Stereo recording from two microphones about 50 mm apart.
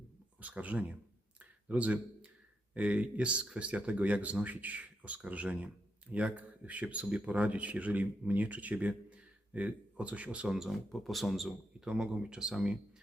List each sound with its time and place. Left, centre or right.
0.3 s speech: right
10.5 s speech: centre
10.9 s speech: centre
12.2 s speech: centre